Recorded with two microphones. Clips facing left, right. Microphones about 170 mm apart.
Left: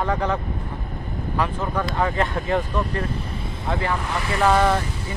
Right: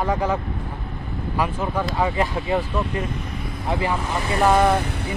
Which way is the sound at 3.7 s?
20° right (ahead or behind).